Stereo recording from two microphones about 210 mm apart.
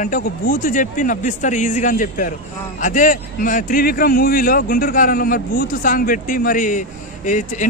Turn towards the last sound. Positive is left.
turn(degrees=35)  # may be behind; listen again after turning